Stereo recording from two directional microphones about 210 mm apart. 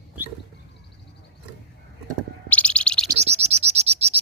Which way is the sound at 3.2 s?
30° right (ahead or behind).